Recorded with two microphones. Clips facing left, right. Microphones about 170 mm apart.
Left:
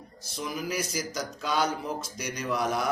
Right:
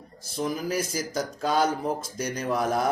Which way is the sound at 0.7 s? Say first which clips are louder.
Right 3 dB; 50° right (ahead or behind).